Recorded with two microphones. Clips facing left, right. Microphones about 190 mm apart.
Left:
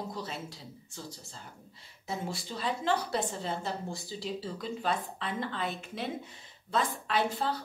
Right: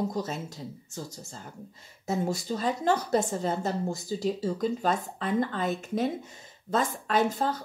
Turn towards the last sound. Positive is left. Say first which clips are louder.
# right 4 dB
turn(degrees=-45)  # may be behind; listen again after turning